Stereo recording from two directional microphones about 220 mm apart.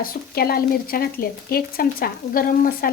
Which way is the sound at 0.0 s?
45° left (ahead or behind).